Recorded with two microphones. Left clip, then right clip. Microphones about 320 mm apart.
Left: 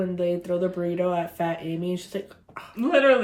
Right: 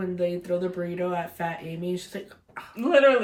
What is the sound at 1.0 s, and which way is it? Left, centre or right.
Speech, left.